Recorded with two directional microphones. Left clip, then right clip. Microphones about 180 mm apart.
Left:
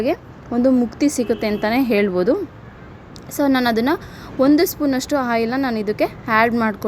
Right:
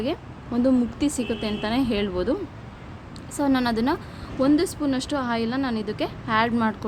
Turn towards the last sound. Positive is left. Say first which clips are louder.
# left 6 dB
turn(degrees=35)  # may be behind; listen again after turning